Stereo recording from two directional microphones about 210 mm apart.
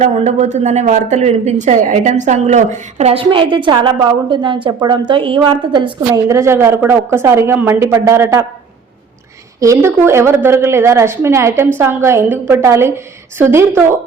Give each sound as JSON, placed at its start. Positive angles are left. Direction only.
{"t": 0.0, "sound": "a woman's voice", "side_deg": -35}
{"t": 9.6, "sound": "a woman's voice", "side_deg": -15}